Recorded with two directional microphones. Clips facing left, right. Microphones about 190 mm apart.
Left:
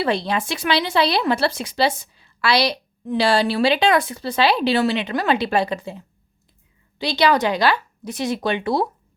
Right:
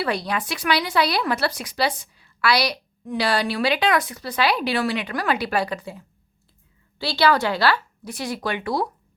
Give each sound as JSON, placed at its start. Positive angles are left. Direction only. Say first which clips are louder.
{"t": 0.0, "sound": "speech", "louder": "left 3 dB", "side_deg": 25}